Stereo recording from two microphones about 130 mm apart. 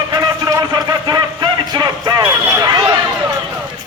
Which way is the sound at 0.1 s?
30° right (ahead or behind).